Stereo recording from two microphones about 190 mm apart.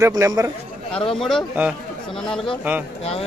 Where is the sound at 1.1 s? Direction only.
Centre (ahead or behind).